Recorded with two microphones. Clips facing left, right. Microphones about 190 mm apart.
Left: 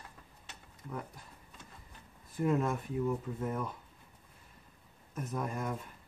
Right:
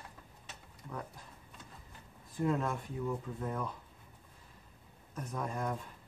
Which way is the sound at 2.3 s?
10° left (ahead or behind).